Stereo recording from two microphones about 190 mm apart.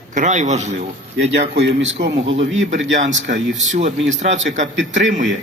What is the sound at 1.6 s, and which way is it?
Speech, 75° right (ahead or behind).